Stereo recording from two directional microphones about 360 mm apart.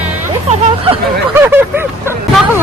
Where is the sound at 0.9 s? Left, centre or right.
Centre.